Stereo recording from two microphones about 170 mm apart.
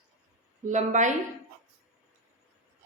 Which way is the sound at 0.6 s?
45° right (ahead or behind).